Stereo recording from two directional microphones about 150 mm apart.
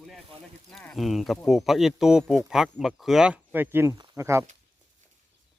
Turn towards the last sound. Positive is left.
turn(degrees=-20)  # may be behind; listen again after turning